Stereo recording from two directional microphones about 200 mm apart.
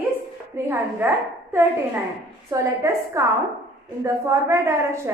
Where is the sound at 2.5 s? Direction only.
15° right (ahead or behind).